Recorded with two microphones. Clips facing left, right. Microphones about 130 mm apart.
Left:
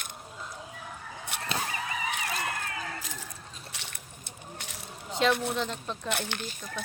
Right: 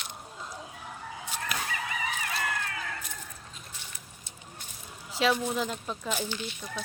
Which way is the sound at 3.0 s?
90° left.